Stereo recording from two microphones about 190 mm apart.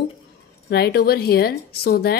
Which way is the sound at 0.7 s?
55° left (ahead or behind).